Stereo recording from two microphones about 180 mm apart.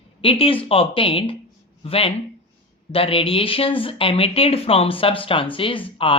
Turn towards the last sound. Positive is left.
turn(degrees=30)  # may be behind; listen again after turning